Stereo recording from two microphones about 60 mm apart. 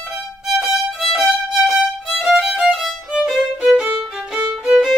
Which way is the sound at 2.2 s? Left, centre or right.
Centre.